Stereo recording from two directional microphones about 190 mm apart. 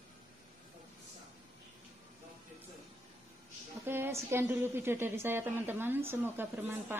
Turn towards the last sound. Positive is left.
turn(degrees=-10)  # may be behind; listen again after turning